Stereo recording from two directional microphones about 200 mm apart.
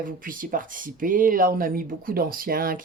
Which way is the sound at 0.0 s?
45° right (ahead or behind).